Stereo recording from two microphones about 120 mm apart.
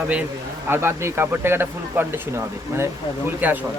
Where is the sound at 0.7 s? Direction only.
20° right (ahead or behind).